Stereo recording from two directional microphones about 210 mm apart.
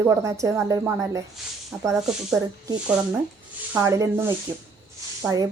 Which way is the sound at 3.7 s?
15° right (ahead or behind).